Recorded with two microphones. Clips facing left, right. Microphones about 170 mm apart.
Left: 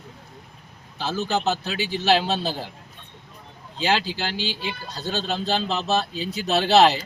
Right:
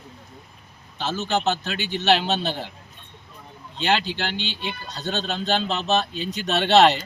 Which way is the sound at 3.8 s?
5° left (ahead or behind).